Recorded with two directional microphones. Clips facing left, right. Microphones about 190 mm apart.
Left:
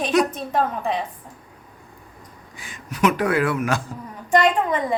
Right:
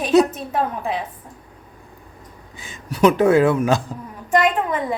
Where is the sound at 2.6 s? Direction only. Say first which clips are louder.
Right 5 dB; 30° right (ahead or behind).